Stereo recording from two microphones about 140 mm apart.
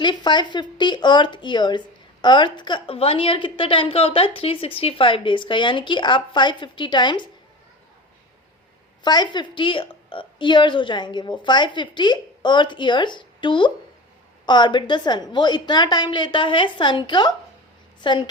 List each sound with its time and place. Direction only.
0.0 s a woman's voice: 35° left (ahead or behind)
9.0 s a woman's voice: 30° left (ahead or behind)